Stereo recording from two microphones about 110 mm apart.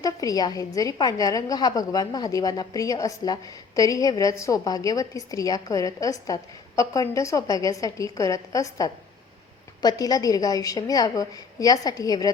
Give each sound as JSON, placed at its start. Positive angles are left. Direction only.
{"t": 0.0, "sound": "a woman's voice", "side_deg": 35}